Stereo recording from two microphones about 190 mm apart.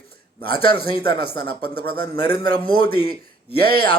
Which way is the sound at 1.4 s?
55° right (ahead or behind).